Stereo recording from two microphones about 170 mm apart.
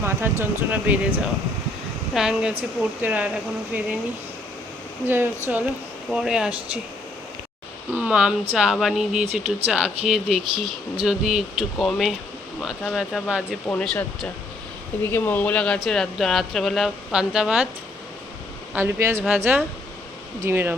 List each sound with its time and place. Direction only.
0.0 s speech: 15° right (ahead or behind)
5.0 s speech: 10° right (ahead or behind)
7.9 s speech: 5° right (ahead or behind)
9.2 s speech: 40° right (ahead or behind)
9.6 s speech: 5° right (ahead or behind)
18.7 s speech: 15° right (ahead or behind)